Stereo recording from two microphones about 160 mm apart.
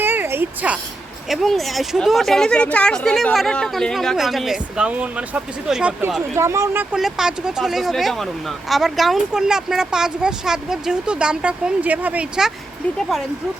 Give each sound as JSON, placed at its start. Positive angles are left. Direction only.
{"t": 0.0, "sound": "a sound", "side_deg": -15}
{"t": 1.3, "sound": "speech", "side_deg": 0}
{"t": 6.3, "sound": "speech", "side_deg": -15}
{"t": 6.9, "sound": "speech", "side_deg": -5}